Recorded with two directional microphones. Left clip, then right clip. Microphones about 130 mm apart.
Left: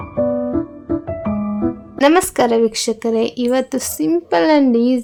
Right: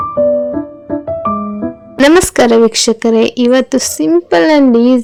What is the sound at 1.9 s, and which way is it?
A woman's voice, 40° right (ahead or behind).